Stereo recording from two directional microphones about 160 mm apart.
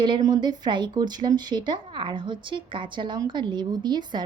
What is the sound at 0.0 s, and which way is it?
Speech, 25° right (ahead or behind).